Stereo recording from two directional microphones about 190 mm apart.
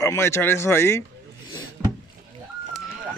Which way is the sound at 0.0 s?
15° left (ahead or behind).